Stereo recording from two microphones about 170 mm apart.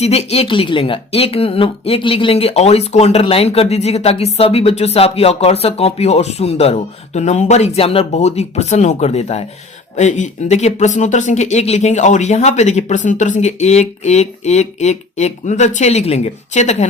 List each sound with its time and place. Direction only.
0.0 s speech: 40° left (ahead or behind)